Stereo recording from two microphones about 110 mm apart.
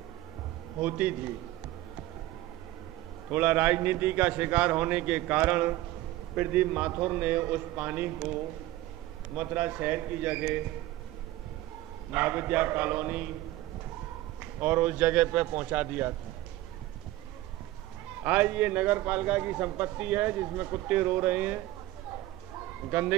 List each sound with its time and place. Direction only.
0.7 s a man's voice: 15° right (ahead or behind)
3.3 s a man's voice: 15° right (ahead or behind)
12.1 s a man's voice: 15° right (ahead or behind)
14.6 s a man's voice: 15° right (ahead or behind)
18.2 s a man's voice: 15° right (ahead or behind)
22.8 s a man's voice: 15° right (ahead or behind)